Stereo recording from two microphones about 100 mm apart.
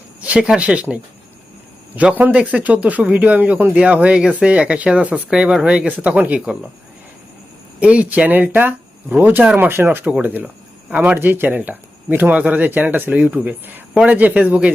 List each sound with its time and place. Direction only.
0.2 s speech: 10° right (ahead or behind)
7.8 s speech: 10° right (ahead or behind)